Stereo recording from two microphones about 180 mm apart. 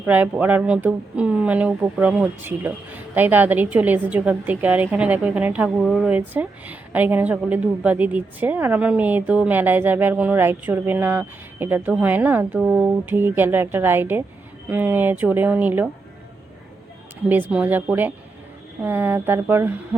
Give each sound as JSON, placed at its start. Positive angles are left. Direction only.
{"t": 0.0, "sound": "speech", "side_deg": -10}
{"t": 17.2, "sound": "speech", "side_deg": -10}